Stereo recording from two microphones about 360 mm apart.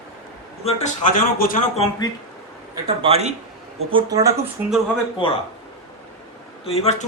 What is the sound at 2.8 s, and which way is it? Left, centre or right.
A man's voice, centre.